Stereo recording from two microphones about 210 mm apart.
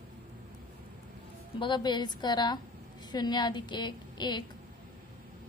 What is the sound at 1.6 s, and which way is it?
A woman's voice, 20° left (ahead or behind).